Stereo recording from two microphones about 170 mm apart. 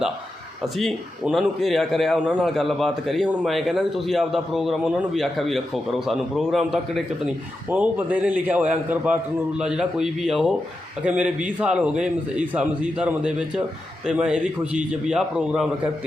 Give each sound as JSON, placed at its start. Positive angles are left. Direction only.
{"t": 0.6, "sound": "a man's voice", "side_deg": 0}